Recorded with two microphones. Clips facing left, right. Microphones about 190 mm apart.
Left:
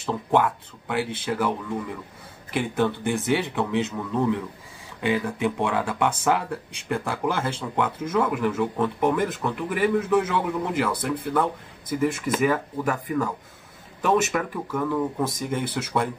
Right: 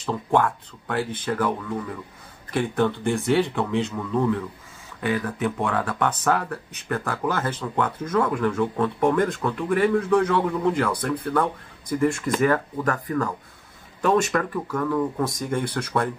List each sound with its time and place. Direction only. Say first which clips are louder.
0.0 s speech: even; 5° left (ahead or behind)
2.5 s speech: right 1 dB; 10° left (ahead or behind)